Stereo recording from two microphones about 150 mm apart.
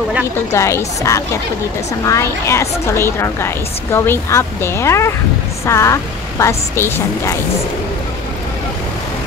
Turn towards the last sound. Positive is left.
turn(degrees=20)  # may be behind; listen again after turning